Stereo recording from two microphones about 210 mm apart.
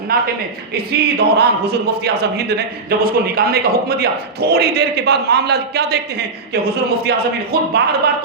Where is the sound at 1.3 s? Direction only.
50° right (ahead or behind).